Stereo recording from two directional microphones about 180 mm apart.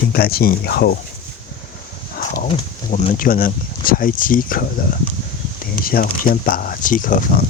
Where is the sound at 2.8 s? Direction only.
45° left (ahead or behind).